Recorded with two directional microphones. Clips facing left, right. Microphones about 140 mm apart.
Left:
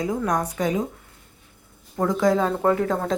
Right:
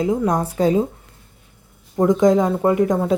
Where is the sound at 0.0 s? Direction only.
25° right (ahead or behind).